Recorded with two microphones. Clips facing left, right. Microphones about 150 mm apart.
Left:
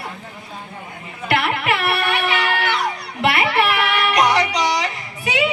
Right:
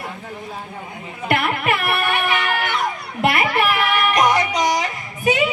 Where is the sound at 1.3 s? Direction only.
50° right (ahead or behind).